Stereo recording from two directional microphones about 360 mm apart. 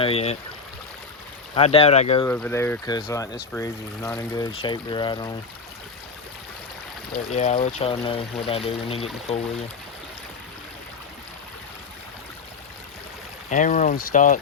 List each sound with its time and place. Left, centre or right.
0.0 s speech: centre
1.5 s speech: centre
7.3 s speech: centre
13.5 s speech: left